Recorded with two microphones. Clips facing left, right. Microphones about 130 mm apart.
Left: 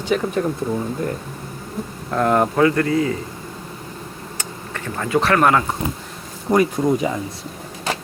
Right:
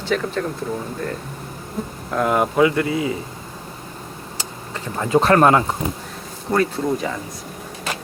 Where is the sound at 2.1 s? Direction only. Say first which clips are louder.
Left 1 dB; 5° right (ahead or behind).